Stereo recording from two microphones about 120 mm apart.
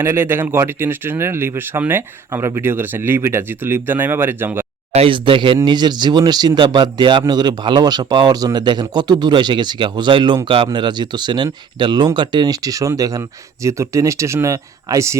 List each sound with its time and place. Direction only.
0.0 s speech: 20° right (ahead or behind)
4.9 s speech: 50° right (ahead or behind); by 15.2 s 25° right (ahead or behind)